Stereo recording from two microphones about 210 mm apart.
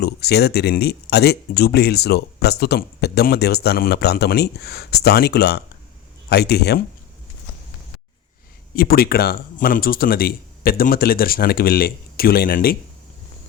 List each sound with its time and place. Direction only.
0.0 s speech: 50° left (ahead or behind)
8.7 s speech: 45° left (ahead or behind)